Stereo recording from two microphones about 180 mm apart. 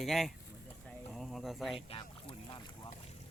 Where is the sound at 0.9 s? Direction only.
Centre (ahead or behind).